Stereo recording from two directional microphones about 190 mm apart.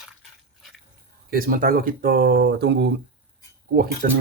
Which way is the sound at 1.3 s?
50° right (ahead or behind).